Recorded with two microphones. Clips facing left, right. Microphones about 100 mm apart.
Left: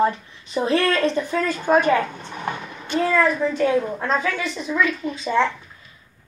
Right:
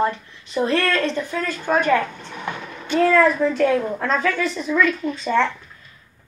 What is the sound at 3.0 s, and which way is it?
A woman's voice, centre (ahead or behind).